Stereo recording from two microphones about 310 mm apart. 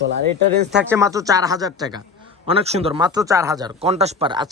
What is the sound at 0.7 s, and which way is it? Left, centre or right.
Speech, centre.